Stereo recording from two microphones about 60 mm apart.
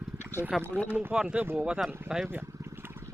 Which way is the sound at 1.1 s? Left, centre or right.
Centre.